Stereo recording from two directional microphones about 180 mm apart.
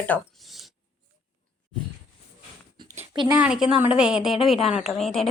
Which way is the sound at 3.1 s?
25° right (ahead or behind).